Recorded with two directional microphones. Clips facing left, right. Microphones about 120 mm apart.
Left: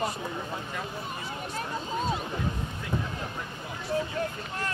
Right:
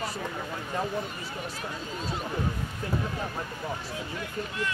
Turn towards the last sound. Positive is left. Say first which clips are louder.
# even
turn(degrees=45)  # may be behind; listen again after turning